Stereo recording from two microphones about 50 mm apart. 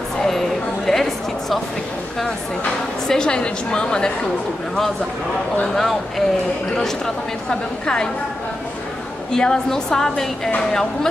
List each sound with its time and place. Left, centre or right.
0.2 s a sound: centre
3.1 s a woman's voice: centre
5.8 s speech: centre
7.8 s a woman's voice: centre
9.3 s a woman's voice: centre